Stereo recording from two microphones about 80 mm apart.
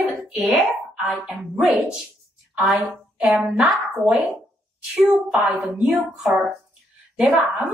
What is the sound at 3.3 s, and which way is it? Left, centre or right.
Speech, centre.